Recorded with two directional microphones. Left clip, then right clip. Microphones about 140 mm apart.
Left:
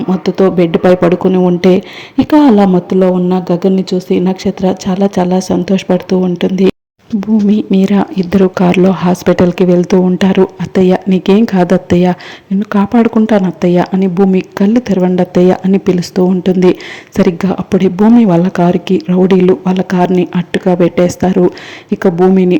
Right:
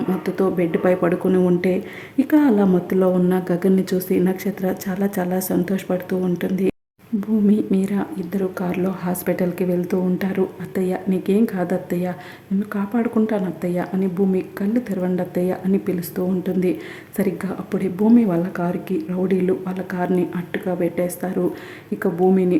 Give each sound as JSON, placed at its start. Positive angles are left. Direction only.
{"t": 0.1, "sound": "speech", "side_deg": 25}
{"t": 0.5, "sound": "speech", "side_deg": 35}
{"t": 3.0, "sound": "speech", "side_deg": 20}
{"t": 4.1, "sound": "speech", "side_deg": 25}
{"t": 7.2, "sound": "speech", "side_deg": 35}